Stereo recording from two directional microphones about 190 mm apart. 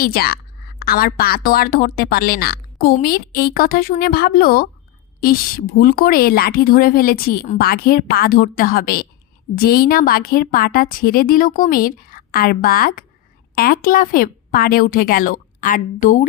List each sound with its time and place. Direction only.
0.0 s speech: 50° left (ahead or behind)